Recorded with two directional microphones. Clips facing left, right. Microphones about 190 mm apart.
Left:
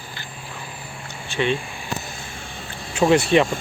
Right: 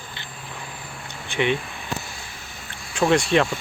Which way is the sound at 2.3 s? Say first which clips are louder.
Left 5 dB; 30° left (ahead or behind).